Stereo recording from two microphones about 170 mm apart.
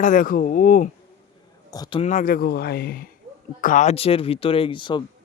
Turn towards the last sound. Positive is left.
turn(degrees=30)  # may be behind; listen again after turning